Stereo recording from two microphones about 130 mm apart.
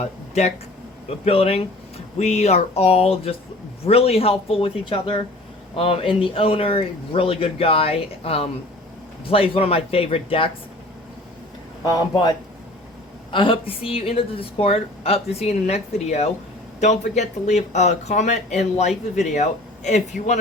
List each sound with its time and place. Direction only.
0.0 s a woman's voice: 55° left (ahead or behind)
11.9 s speech: 30° left (ahead or behind)
13.3 s a woman's voice: 40° left (ahead or behind); by 20.4 s 65° left (ahead or behind)